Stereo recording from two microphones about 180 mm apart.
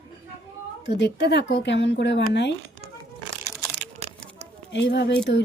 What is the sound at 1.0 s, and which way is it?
Speech, 75° left (ahead or behind).